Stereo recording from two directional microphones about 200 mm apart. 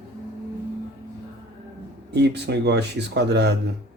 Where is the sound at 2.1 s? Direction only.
60° right (ahead or behind).